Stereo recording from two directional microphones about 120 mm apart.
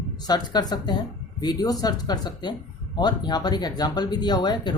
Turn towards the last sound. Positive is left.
turn(degrees=40)  # may be behind; listen again after turning